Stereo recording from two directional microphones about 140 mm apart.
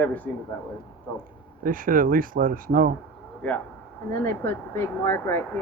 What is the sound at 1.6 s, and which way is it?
Speech, 80° right.